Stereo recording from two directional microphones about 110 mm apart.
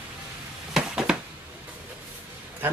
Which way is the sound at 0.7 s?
5° right (ahead or behind).